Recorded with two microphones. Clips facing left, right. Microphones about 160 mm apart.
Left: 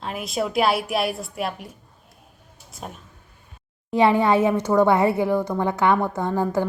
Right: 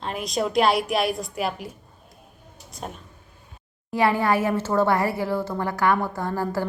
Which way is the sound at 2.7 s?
Centre (ahead or behind).